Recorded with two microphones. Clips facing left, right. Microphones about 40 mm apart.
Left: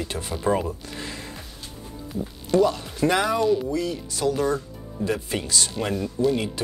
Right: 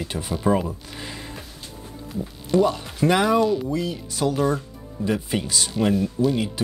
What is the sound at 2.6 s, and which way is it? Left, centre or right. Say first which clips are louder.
Speech: even; centre.